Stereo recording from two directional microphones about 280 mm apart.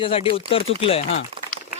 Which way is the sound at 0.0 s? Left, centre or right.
Centre.